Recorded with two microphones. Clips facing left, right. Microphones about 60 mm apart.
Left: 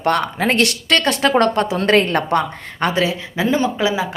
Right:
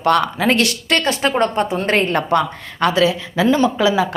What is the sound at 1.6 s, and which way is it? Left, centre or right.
Speech, left.